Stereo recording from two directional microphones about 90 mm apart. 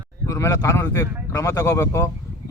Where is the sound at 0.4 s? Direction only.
40° left (ahead or behind).